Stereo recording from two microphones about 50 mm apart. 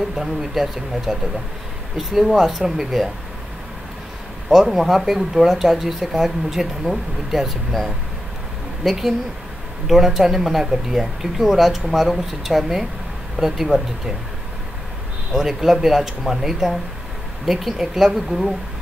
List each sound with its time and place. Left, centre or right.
0.1 s speech: centre
4.5 s speech: centre
15.3 s speech: centre